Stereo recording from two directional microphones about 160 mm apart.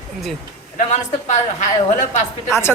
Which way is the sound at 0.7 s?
50° left (ahead or behind).